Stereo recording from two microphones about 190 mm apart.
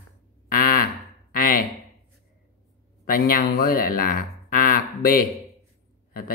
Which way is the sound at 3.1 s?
50° left (ahead or behind).